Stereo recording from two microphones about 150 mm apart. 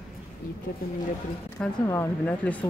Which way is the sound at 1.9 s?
15° left (ahead or behind).